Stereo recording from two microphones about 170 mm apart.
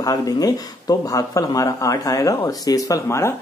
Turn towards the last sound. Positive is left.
turn(degrees=20)  # may be behind; listen again after turning